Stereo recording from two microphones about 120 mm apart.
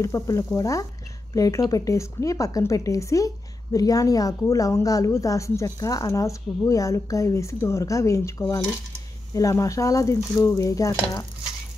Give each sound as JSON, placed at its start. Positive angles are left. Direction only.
{"t": 0.0, "sound": "a woman's voice", "side_deg": 25}